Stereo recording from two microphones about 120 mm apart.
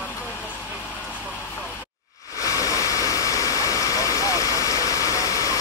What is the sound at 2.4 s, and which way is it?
Vehicle, 30° left (ahead or behind).